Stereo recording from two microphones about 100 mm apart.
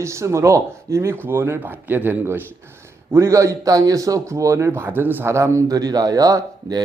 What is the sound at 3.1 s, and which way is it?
A man's voice, 30° right (ahead or behind).